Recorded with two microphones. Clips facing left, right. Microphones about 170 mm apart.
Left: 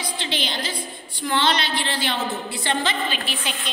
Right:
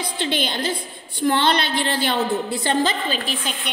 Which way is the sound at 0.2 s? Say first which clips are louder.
Right 7 dB; 50° right (ahead or behind).